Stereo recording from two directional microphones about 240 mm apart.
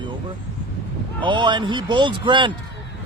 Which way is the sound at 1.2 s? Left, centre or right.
Centre.